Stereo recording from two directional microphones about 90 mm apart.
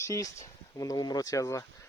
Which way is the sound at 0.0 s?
35° left (ahead or behind).